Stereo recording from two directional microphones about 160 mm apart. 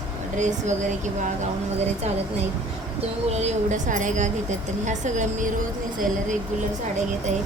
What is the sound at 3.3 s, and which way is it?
A woman's voice, 45° right (ahead or behind).